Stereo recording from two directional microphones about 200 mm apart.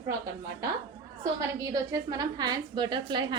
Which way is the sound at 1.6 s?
15° right (ahead or behind).